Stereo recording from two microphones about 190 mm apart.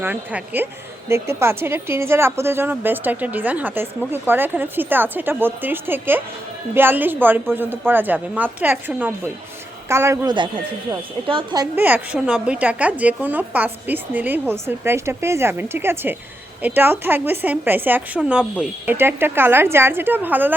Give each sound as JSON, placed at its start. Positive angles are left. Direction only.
{"t": 0.0, "sound": "a woman's voice", "side_deg": -10}
{"t": 11.8, "sound": "a woman's voice", "side_deg": -10}